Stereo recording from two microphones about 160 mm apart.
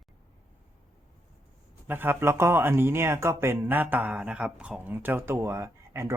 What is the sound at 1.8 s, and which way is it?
Speech, 15° right (ahead or behind).